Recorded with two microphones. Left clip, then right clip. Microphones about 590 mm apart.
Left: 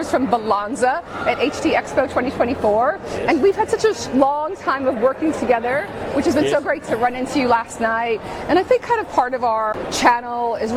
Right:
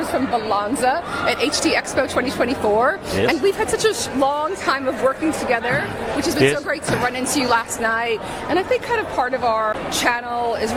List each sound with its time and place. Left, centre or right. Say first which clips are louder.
0.5 s speech: even; left